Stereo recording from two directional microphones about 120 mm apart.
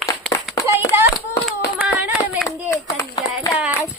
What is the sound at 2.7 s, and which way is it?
Clapping, 25° left (ahead or behind).